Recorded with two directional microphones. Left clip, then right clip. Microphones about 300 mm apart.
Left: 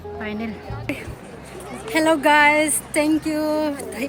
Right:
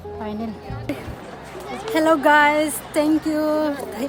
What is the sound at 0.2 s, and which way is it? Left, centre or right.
Speech, centre.